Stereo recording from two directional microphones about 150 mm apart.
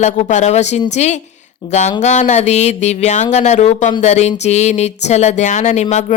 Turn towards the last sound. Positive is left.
turn(degrees=50)  # may be behind; listen again after turning